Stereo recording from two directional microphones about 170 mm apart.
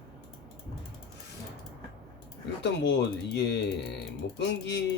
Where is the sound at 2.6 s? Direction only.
90° left.